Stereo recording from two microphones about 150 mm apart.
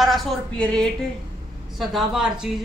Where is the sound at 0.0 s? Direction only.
Centre (ahead or behind).